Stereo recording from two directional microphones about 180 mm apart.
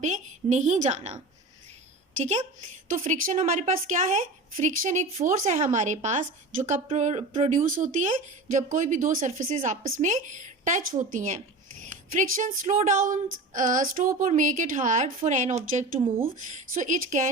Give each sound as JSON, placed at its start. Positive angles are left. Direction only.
{"t": 0.0, "sound": "a woman's voice", "side_deg": -40}
{"t": 2.9, "sound": "a woman's voice", "side_deg": -45}
{"t": 16.3, "sound": "a woman's voice", "side_deg": -45}